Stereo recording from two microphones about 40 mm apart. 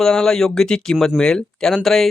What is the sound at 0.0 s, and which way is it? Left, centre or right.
Speech, centre.